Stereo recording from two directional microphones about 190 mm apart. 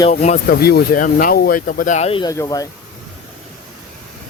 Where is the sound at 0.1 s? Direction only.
40° left (ahead or behind).